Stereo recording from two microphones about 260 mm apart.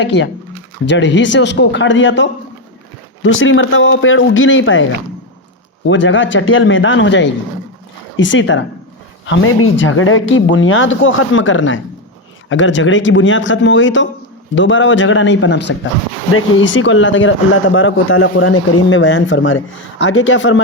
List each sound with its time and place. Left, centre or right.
0.0 s speech: left
5.9 s speech: left